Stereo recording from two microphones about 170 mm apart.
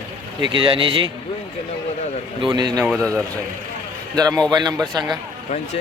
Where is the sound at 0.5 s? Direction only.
30° right (ahead or behind).